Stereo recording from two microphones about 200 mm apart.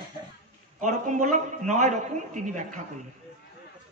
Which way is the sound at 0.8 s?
40° right (ahead or behind).